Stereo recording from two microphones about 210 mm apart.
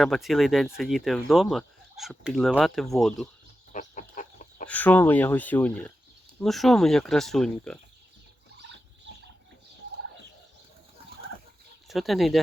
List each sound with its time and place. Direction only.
0.0 s speech: centre (ahead or behind)
3.7 s chicken: 35° left (ahead or behind)
4.7 s speech: 10° left (ahead or behind)
11.9 s speech: centre (ahead or behind)